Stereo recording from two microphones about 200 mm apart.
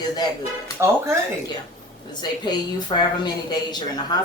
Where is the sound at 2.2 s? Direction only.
20° left (ahead or behind).